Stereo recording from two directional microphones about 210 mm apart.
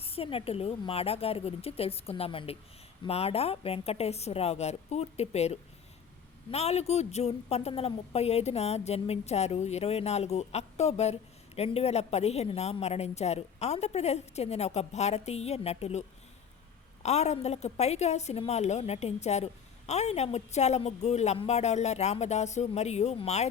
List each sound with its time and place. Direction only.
0.0 s a woman's voice: 25° left (ahead or behind)